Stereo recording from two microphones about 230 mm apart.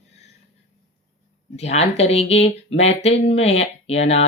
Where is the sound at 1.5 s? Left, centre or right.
Left.